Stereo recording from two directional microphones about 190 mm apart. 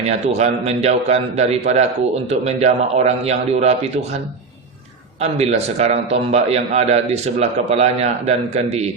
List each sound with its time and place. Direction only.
0.0 s a man's voice: 35° right (ahead or behind)
5.2 s a man's voice: 35° right (ahead or behind)